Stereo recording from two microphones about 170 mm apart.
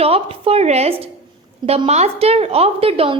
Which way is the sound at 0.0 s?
35° right (ahead or behind).